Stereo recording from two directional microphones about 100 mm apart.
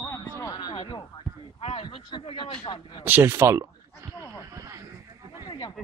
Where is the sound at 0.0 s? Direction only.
30° left (ahead or behind); by 1.0 s 50° left (ahead or behind).